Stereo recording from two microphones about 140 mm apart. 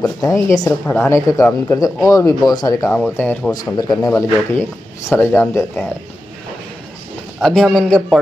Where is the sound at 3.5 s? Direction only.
30° left (ahead or behind).